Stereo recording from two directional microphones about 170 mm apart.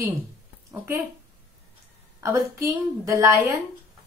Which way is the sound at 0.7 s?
20° right (ahead or behind).